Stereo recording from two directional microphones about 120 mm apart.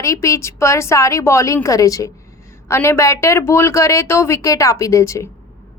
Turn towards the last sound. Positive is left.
turn(degrees=25)  # may be behind; listen again after turning